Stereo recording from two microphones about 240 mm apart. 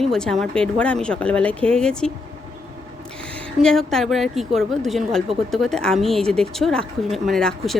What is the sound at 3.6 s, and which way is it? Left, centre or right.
A woman's voice, centre.